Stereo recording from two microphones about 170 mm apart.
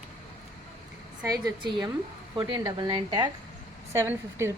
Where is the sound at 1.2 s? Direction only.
20° right (ahead or behind).